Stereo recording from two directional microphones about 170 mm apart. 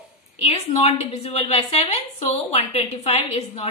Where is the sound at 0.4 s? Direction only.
35° left (ahead or behind).